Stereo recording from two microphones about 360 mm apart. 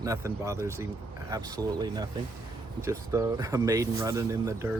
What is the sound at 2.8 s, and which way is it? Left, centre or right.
Speech, centre.